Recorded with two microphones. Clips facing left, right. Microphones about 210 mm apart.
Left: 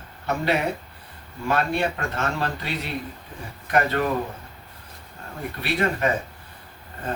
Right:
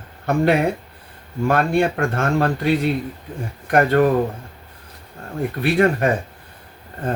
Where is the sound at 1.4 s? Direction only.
50° right (ahead or behind).